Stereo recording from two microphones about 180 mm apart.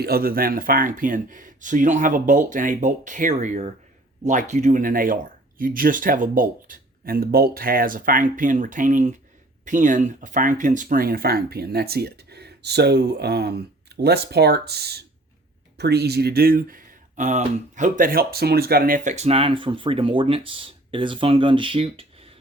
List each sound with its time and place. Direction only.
0.0 s speech: 55° right (ahead or behind); by 22.3 s 30° right (ahead or behind)